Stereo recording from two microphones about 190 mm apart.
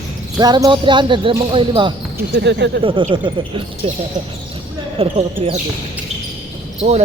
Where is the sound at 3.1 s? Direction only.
25° right (ahead or behind).